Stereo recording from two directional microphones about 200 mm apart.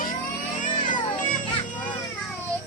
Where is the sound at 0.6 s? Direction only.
40° left (ahead or behind).